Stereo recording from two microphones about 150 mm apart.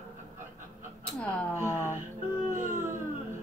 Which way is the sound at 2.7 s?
15° right (ahead or behind).